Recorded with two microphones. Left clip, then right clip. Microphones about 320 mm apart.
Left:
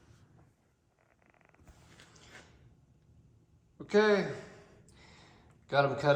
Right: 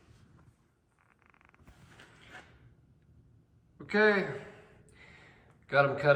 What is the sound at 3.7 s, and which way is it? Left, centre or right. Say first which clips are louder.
Speech: even; centre.